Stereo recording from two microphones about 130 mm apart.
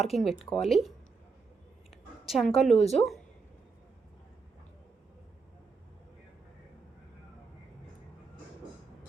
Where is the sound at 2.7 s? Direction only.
55° left (ahead or behind).